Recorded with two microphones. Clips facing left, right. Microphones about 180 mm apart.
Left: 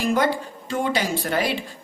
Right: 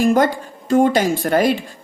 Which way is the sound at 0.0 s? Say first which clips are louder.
Right 6 dB; 45° right (ahead or behind).